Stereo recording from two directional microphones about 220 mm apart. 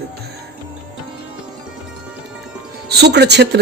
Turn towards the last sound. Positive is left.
turn(degrees=-50)  # may be behind; listen again after turning